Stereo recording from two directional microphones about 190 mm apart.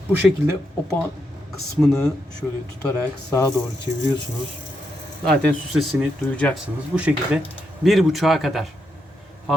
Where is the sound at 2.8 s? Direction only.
20° left (ahead or behind).